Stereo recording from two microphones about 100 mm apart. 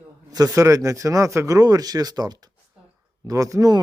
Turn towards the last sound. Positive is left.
turn(degrees=-35)  # may be behind; listen again after turning